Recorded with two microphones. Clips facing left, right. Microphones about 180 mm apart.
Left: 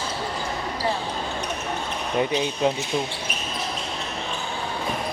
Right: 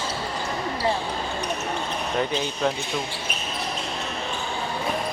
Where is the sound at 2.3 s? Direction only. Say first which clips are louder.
Left 2 dB; 15° left (ahead or behind).